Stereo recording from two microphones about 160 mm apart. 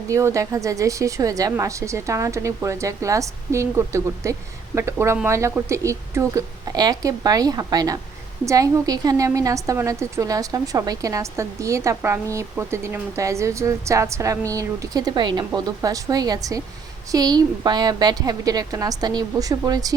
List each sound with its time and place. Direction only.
0.1 s a woman's voice: 20° right (ahead or behind)